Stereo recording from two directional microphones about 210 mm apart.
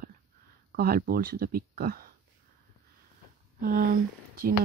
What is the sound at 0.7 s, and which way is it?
Speech, 45° right (ahead or behind).